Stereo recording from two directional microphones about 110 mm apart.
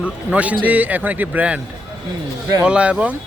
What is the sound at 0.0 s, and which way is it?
Speech, 10° right (ahead or behind).